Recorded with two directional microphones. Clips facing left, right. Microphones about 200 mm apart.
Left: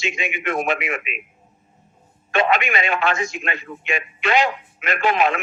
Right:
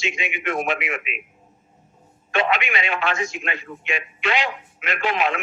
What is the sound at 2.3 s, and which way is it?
A man's voice, 45° left (ahead or behind).